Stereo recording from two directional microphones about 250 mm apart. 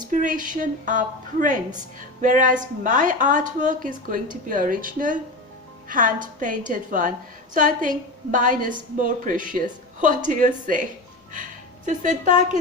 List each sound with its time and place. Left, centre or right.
0.0 s a woman's voice: right
11.9 s a woman's voice: right